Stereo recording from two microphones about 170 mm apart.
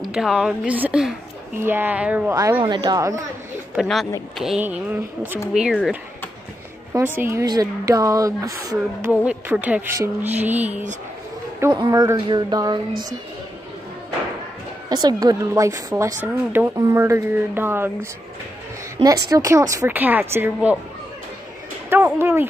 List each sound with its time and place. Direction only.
0.1 s a woman's voice: 5° right (ahead or behind); by 3.3 s 20° right (ahead or behind)
3.7 s a woman's voice: centre (ahead or behind)
6.9 s a woman's voice: 15° right (ahead or behind)
9.2 s a woman's voice: 10° right (ahead or behind)
11.7 s a woman's voice: 25° right (ahead or behind)
14.9 s a woman's voice: 25° right (ahead or behind)
19.0 s a woman's voice: 20° right (ahead or behind)
21.8 s a woman's voice: 15° right (ahead or behind)